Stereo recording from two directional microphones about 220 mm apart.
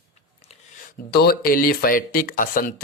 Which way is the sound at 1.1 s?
45° left (ahead or behind).